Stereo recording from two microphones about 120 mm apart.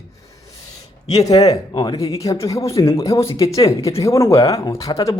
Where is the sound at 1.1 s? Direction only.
30° left (ahead or behind).